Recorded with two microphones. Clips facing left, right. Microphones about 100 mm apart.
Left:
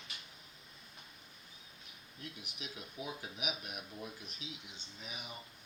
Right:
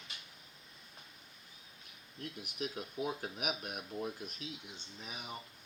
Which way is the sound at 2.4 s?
50° right (ahead or behind).